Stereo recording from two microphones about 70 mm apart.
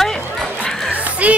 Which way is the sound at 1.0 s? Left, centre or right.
Right.